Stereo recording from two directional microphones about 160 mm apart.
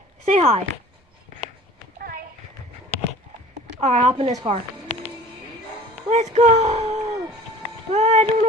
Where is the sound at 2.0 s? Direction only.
65° right (ahead or behind).